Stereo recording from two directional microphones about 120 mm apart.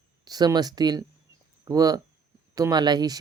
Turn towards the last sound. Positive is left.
turn(degrees=-35)  # may be behind; listen again after turning